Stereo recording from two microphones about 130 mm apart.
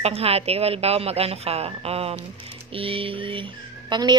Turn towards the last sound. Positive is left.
turn(degrees=-35)  # may be behind; listen again after turning